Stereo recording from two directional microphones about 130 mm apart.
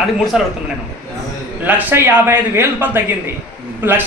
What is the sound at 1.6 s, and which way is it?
Speech, 15° right (ahead or behind).